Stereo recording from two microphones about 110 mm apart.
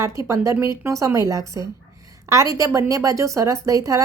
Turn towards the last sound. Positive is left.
turn(degrees=-30)  # may be behind; listen again after turning